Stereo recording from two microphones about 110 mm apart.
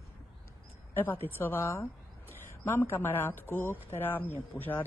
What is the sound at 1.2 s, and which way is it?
A woman's voice, 20° left (ahead or behind).